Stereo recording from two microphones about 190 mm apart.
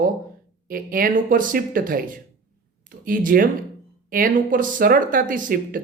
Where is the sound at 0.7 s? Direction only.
50° right (ahead or behind).